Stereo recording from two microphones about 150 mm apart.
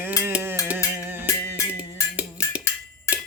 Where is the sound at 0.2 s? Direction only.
15° right (ahead or behind).